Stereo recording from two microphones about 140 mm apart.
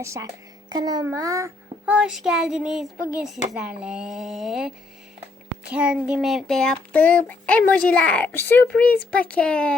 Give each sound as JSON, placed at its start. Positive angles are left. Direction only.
{"t": 0.0, "sound": "a child's voice", "side_deg": -20}
{"t": 1.8, "sound": "a child's voice", "side_deg": -5}